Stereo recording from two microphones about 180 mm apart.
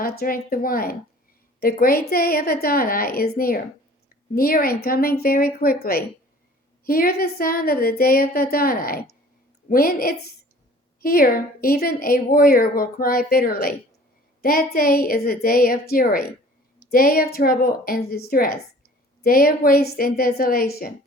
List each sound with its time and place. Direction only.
0.0 s a woman's voice: 55° left (ahead or behind)